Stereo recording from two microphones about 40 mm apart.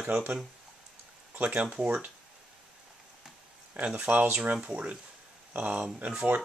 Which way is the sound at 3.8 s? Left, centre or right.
Right.